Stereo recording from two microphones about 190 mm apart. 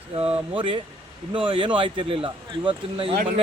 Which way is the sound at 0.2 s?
30° right (ahead or behind).